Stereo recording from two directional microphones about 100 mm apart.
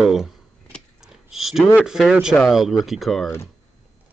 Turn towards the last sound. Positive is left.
turn(degrees=0)  # may be behind; listen again after turning